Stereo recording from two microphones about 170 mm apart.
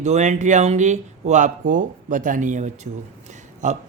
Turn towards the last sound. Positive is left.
turn(degrees=-45)  # may be behind; listen again after turning